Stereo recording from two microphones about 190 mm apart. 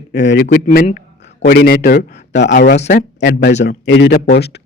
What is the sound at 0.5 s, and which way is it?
A man's voice, 45° left (ahead or behind).